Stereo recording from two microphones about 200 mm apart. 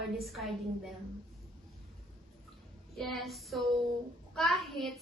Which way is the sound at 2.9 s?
Centre (ahead or behind).